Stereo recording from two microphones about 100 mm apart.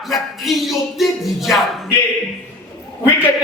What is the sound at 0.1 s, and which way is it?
Music, centre (ahead or behind).